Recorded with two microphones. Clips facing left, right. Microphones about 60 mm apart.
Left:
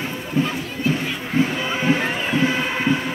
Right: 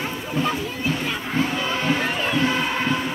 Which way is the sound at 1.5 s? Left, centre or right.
Centre.